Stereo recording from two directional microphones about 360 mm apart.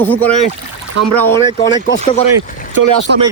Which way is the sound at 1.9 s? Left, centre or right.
Left.